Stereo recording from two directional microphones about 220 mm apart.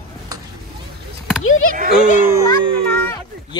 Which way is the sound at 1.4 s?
65° left (ahead or behind).